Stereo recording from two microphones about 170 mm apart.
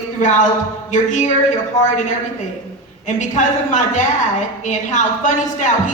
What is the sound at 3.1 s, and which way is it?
A man's voice, 45° left (ahead or behind).